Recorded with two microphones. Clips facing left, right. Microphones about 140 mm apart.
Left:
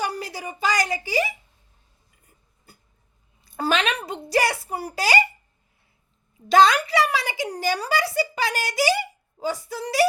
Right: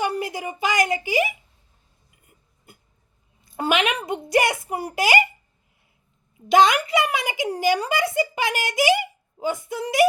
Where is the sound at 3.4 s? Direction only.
15° right (ahead or behind).